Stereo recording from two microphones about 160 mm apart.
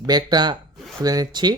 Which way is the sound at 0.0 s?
25° right (ahead or behind).